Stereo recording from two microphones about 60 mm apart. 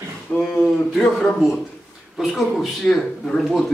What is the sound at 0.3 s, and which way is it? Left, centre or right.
Speech, left.